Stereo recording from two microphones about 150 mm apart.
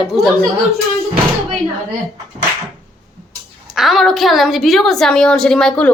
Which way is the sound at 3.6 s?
Centre (ahead or behind).